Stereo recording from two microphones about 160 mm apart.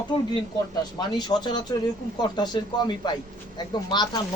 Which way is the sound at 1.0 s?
25° left (ahead or behind).